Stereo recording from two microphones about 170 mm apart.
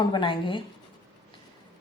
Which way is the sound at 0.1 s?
30° left (ahead or behind).